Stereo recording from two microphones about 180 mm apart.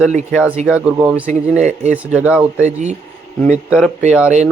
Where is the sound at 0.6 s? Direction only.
5° right (ahead or behind).